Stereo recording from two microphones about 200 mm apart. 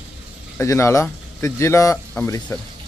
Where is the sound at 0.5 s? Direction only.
15° left (ahead or behind).